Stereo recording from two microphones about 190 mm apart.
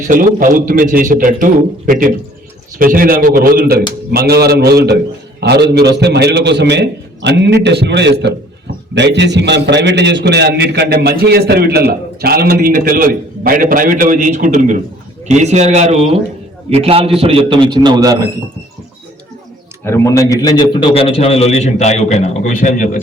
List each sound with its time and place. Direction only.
0.1 s a man's voice: 45° right (ahead or behind); by 18.3 s 20° right (ahead or behind)
19.8 s a man's voice: 15° left (ahead or behind); by 22.9 s 40° left (ahead or behind)